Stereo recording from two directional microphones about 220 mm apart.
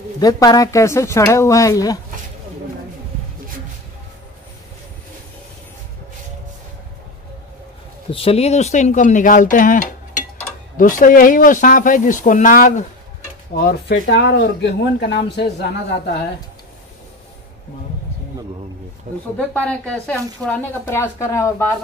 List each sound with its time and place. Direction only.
0.2 s speech: 15° left (ahead or behind)
8.1 s speech: 25° left (ahead or behind); by 15.7 s 50° left (ahead or behind)
19.3 s speech: 5° left (ahead or behind)